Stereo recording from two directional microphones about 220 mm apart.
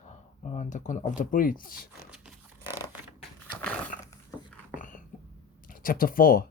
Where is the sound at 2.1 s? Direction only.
5° right (ahead or behind).